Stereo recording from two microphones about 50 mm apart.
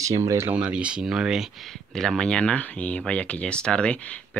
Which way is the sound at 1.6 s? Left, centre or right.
Centre.